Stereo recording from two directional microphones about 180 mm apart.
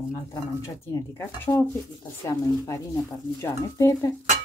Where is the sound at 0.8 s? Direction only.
15° left (ahead or behind).